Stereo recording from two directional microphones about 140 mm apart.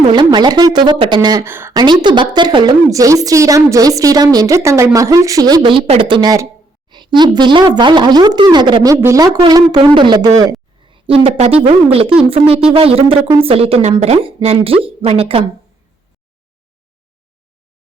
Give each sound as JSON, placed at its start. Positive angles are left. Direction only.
{"t": 0.1, "sound": "speech", "side_deg": -30}
{"t": 1.5, "sound": "speech", "side_deg": -15}
{"t": 1.7, "sound": "speech", "side_deg": -30}
{"t": 2.9, "sound": "a woman's voice", "side_deg": -25}